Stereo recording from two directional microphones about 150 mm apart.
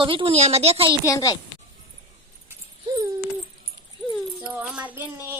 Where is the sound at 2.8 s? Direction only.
25° right (ahead or behind).